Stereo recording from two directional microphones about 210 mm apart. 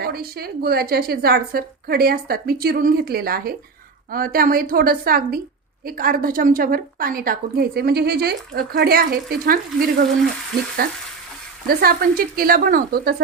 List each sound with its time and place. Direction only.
0.0 s a woman's voice: 45° right (ahead or behind)